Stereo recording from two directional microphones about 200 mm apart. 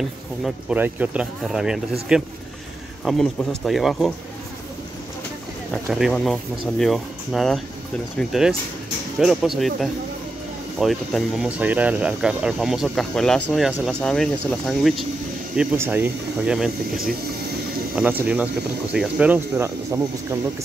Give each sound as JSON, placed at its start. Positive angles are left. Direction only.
{"t": 0.4, "sound": "speech", "side_deg": -5}
{"t": 5.7, "sound": "speech", "side_deg": 0}
{"t": 10.8, "sound": "speech", "side_deg": 0}